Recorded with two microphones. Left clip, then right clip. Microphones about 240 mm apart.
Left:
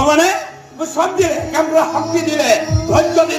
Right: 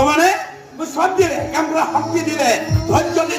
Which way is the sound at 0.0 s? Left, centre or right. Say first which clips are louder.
Left 1 dB; left.